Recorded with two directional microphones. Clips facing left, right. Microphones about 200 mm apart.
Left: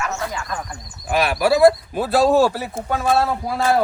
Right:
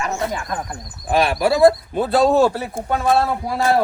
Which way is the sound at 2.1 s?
5° left (ahead or behind).